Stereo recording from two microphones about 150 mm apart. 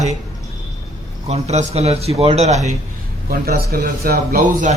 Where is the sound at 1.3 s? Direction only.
45° right (ahead or behind).